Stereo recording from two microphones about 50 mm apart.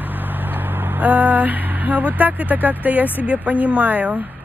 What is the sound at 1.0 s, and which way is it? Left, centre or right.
Speech, right.